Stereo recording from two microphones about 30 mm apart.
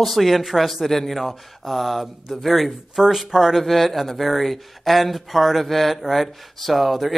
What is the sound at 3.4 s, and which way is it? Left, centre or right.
Speech, centre.